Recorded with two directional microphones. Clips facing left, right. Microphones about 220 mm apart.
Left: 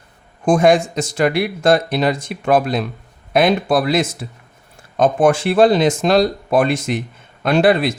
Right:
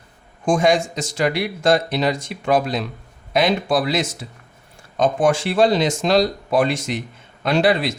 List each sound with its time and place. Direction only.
0.4 s speech: 55° left (ahead or behind)